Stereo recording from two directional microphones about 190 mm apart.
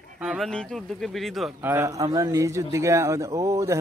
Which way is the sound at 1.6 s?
10° right (ahead or behind).